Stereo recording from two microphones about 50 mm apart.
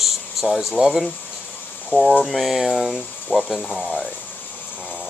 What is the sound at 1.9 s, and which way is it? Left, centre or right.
Speech, left.